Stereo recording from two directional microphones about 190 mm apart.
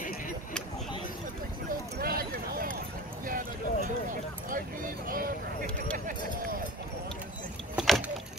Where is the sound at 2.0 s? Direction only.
50° right (ahead or behind).